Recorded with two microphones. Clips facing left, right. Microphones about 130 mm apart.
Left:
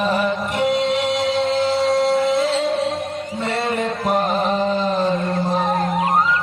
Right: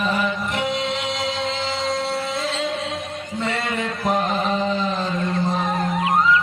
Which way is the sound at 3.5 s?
35° left (ahead or behind).